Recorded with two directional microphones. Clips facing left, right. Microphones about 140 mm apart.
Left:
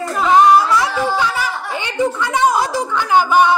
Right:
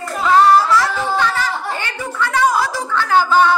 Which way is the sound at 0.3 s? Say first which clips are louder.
Even; 15° left (ahead or behind).